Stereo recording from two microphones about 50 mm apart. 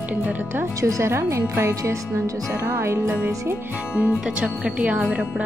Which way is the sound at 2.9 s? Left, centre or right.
Right.